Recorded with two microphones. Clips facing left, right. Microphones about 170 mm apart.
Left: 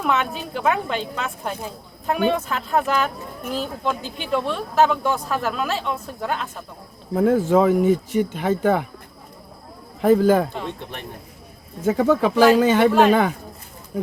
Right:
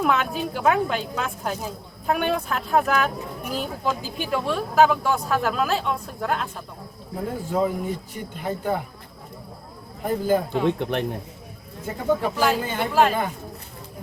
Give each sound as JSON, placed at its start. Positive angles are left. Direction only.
{"t": 0.0, "sound": "a woman's voice", "side_deg": 0}
{"t": 7.2, "sound": "speech", "side_deg": 90}
{"t": 10.0, "sound": "speech", "side_deg": 90}
{"t": 11.8, "sound": "speech", "side_deg": 90}